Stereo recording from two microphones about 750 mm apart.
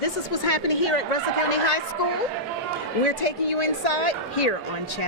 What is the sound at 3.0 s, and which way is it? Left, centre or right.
Speech, left.